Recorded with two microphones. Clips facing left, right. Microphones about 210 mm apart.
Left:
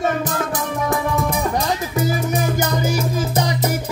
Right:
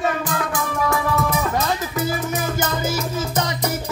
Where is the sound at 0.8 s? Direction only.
15° left (ahead or behind).